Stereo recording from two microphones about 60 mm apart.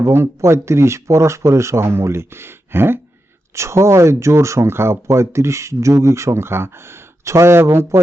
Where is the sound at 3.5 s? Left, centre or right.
Right.